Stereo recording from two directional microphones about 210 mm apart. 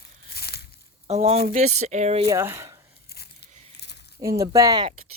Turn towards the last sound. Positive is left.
turn(degrees=-20)  # may be behind; listen again after turning